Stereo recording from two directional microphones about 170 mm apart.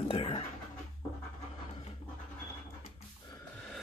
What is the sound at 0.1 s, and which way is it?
Speech, 30° left (ahead or behind).